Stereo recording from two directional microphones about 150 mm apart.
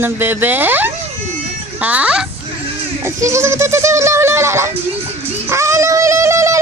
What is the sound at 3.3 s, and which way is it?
Speech, 15° right (ahead or behind).